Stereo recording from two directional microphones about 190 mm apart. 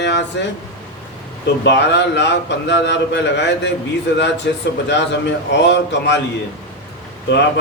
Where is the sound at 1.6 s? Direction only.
65° left (ahead or behind).